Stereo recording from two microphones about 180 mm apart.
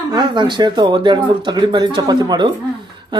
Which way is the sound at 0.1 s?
25° right (ahead or behind).